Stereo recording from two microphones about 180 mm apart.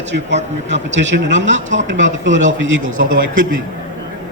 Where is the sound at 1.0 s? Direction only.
80° right.